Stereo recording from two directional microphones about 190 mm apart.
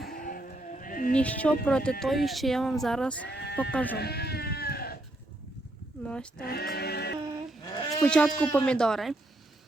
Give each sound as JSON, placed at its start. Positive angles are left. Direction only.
{"t": 0.1, "sound": "vehicle", "side_deg": 50}
{"t": 1.1, "sound": "speech", "side_deg": 5}
{"t": 3.2, "sound": "a sound", "side_deg": 60}
{"t": 3.6, "sound": "speech", "side_deg": 5}
{"t": 3.9, "sound": "sheep", "side_deg": 55}
{"t": 6.0, "sound": "speech", "side_deg": 5}
{"t": 6.4, "sound": "a sound", "side_deg": 55}
{"t": 7.9, "sound": "speech", "side_deg": 5}